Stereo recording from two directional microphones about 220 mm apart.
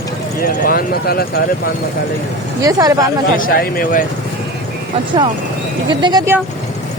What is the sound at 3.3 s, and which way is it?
Speech, 40° left (ahead or behind).